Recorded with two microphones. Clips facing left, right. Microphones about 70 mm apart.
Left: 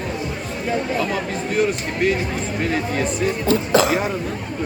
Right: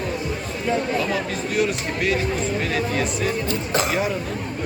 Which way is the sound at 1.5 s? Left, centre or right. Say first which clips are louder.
Left 2 dB; left.